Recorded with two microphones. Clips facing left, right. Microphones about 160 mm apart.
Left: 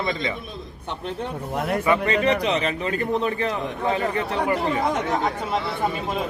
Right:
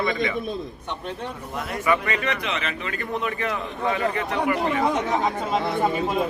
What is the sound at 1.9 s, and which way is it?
A man's voice, 30° left (ahead or behind).